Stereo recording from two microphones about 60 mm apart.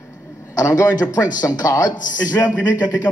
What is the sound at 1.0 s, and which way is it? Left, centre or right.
Speech, left.